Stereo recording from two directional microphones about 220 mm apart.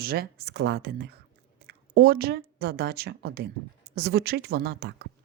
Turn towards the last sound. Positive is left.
turn(degrees=-45)  # may be behind; listen again after turning